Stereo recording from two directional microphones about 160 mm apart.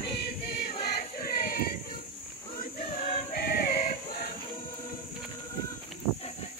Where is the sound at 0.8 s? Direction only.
70° left (ahead or behind).